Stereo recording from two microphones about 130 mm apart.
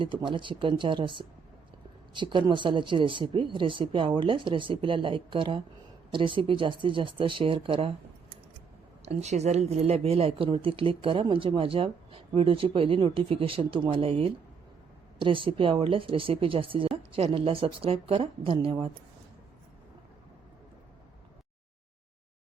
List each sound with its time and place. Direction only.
0.0 s speech: 40° right (ahead or behind)
9.0 s a woman's voice: 60° right (ahead or behind); by 18.9 s 40° right (ahead or behind)